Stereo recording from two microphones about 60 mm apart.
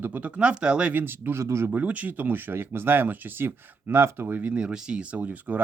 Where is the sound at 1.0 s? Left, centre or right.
Right.